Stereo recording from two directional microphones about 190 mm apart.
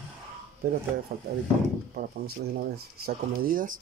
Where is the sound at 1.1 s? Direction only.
50° right (ahead or behind).